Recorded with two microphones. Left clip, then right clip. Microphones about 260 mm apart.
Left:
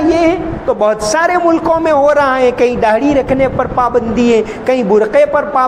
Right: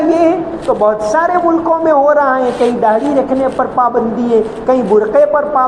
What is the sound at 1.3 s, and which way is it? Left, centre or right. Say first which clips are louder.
A man's voice: left 1 dB; left.